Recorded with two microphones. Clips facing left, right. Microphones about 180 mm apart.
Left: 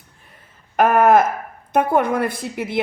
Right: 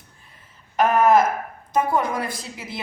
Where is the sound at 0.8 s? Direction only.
55° left (ahead or behind).